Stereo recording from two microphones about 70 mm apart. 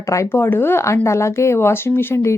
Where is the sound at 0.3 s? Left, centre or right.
Left.